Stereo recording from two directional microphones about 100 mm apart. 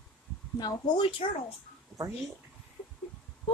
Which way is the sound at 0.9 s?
65° left (ahead or behind).